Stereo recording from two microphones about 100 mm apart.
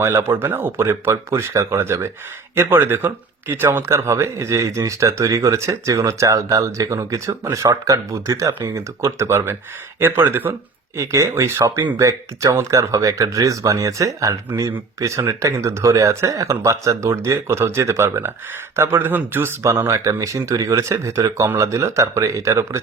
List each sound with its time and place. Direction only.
0.0 s speech: 25° right (ahead or behind)
19.6 s speech: 30° right (ahead or behind)